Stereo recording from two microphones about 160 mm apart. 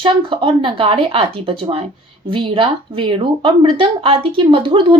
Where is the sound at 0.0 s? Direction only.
35° right (ahead or behind).